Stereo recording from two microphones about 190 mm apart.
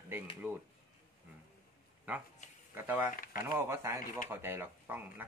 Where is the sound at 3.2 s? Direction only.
50° left (ahead or behind).